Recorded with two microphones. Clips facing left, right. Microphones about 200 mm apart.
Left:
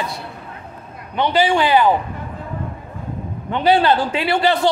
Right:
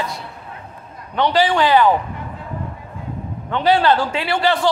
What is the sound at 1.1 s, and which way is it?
Speech, 10° left (ahead or behind).